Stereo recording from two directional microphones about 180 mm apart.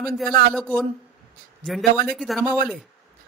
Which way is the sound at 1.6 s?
Centre (ahead or behind).